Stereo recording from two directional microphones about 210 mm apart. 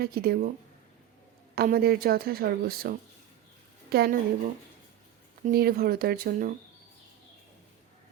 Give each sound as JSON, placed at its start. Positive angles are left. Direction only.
{"t": 0.0, "sound": "a woman's voice", "side_deg": -45}
{"t": 1.5, "sound": "a woman's voice", "side_deg": -45}
{"t": 5.5, "sound": "a woman's voice", "side_deg": -45}